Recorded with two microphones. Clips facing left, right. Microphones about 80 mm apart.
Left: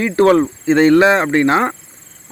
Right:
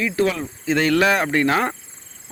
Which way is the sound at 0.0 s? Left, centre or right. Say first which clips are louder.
Left 9 dB; left.